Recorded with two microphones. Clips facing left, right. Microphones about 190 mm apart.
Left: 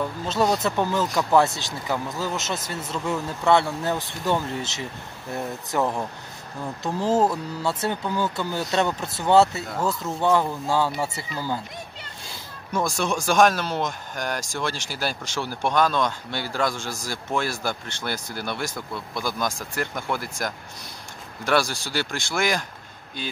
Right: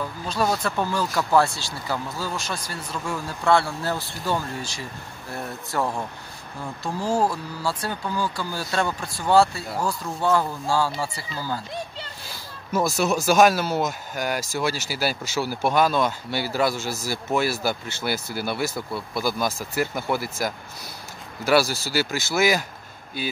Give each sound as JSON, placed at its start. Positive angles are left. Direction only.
{"t": 0.3, "sound": "speech", "side_deg": 20}
{"t": 12.7, "sound": "speech", "side_deg": -5}